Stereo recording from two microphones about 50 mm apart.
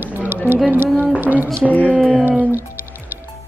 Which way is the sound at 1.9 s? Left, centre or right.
Right.